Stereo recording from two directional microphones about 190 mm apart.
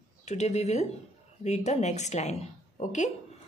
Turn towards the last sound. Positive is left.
turn(degrees=40)  # may be behind; listen again after turning